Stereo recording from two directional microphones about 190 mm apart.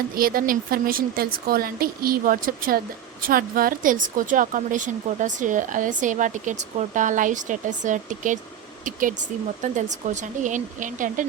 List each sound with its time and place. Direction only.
0.2 s a woman's voice: 50° right (ahead or behind)